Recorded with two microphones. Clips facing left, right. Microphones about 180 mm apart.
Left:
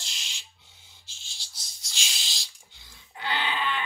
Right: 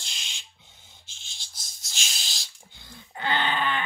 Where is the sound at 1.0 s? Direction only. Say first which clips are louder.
Right 1 dB; 55° right (ahead or behind).